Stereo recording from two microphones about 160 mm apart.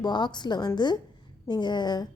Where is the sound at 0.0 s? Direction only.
25° left (ahead or behind).